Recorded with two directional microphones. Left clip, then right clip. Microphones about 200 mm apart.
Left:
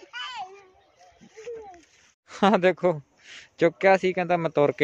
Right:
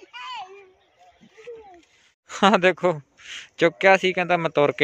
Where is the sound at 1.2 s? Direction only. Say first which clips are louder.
Left 4 dB; 50° left (ahead or behind).